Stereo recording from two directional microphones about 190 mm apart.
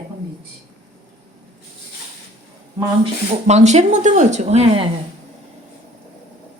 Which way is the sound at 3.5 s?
35° right (ahead or behind).